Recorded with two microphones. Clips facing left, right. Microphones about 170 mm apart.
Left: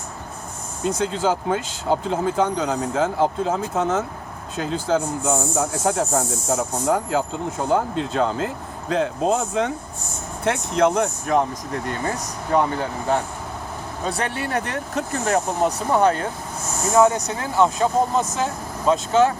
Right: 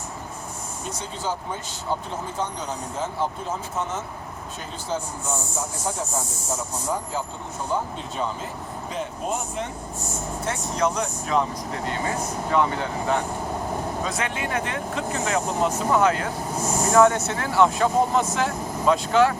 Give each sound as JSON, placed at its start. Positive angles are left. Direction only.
{"t": 0.9, "sound": "speech", "side_deg": 90}
{"t": 10.4, "sound": "speech", "side_deg": 60}
{"t": 11.9, "sound": "speech", "side_deg": 40}
{"t": 16.9, "sound": "speech", "side_deg": 15}